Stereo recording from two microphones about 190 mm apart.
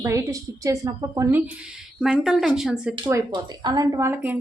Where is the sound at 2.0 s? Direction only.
Centre (ahead or behind).